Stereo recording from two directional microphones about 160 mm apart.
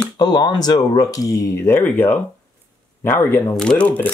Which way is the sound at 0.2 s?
25° left (ahead or behind).